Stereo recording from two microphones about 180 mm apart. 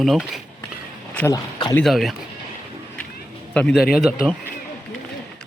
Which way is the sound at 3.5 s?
5° left (ahead or behind).